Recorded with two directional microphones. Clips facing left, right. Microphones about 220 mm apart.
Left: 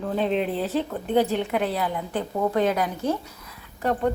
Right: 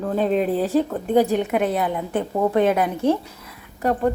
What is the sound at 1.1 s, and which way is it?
A woman's voice, 10° right (ahead or behind).